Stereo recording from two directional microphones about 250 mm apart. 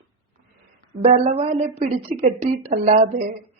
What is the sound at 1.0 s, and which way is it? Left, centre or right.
A woman's voice, right.